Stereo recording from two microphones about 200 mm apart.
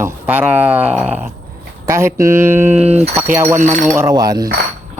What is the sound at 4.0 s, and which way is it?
Speech, 15° right (ahead or behind).